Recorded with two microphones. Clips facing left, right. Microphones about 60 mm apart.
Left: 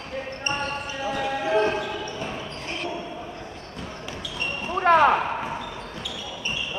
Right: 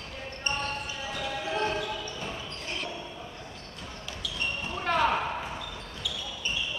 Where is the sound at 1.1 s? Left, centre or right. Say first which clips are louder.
Left 9 dB; left.